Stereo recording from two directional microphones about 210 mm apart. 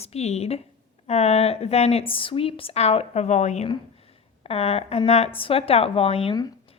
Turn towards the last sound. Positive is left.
turn(degrees=25)  # may be behind; listen again after turning